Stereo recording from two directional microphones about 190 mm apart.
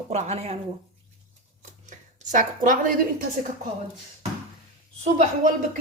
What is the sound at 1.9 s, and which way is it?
A woman's voice, 40° right (ahead or behind).